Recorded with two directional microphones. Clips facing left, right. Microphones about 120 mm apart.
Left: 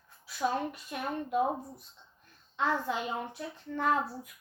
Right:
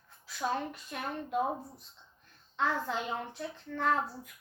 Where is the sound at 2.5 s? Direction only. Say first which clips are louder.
Left 1 dB; 10° left (ahead or behind).